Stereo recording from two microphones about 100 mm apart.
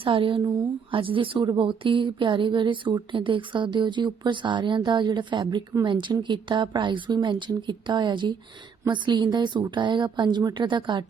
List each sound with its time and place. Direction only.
0.0 s a woman's voice: 60° right (ahead or behind)